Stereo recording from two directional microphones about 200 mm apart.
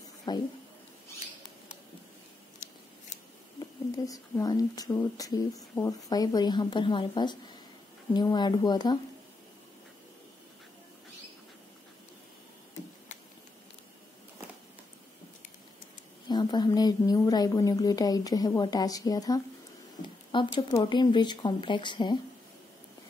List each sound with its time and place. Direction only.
0.3 s speech: 20° left (ahead or behind)
3.5 s speech: 15° left (ahead or behind)
16.3 s speech: 20° left (ahead or behind)